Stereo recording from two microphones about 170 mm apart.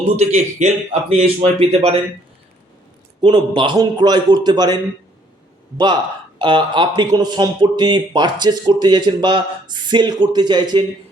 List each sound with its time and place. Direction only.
0.2 s a man's voice: 40° right (ahead or behind)
3.2 s speech: 25° right (ahead or behind)